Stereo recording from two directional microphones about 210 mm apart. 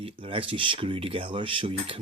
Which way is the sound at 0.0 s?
25° right (ahead or behind).